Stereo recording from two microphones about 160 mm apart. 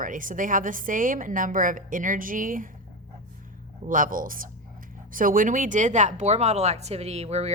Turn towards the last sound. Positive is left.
turn(degrees=-40)  # may be behind; listen again after turning